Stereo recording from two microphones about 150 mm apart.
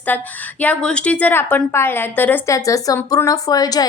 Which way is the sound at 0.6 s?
10° left (ahead or behind).